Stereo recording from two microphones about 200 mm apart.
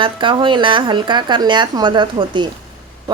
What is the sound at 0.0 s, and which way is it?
A woman's voice, 25° right (ahead or behind).